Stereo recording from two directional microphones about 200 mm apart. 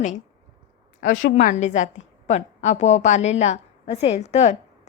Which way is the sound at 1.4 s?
40° left (ahead or behind).